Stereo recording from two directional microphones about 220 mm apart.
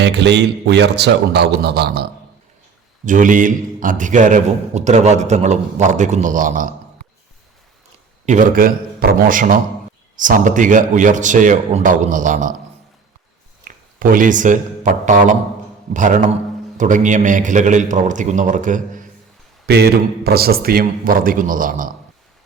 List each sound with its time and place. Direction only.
0.0 s a man's voice: 50° right (ahead or behind)
3.1 s a man's voice: 35° right (ahead or behind)
8.3 s a man's voice: 35° right (ahead or behind)
13.7 s a man's voice: 40° right (ahead or behind)
19.6 s a man's voice: 45° right (ahead or behind)